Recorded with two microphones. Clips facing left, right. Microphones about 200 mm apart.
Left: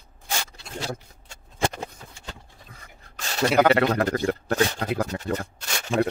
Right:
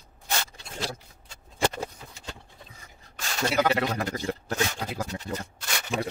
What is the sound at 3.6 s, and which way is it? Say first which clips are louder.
Speech: left 6 dB; 60° left (ahead or behind).